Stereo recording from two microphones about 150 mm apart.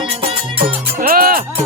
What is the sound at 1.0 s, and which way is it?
Music, 75° right (ahead or behind).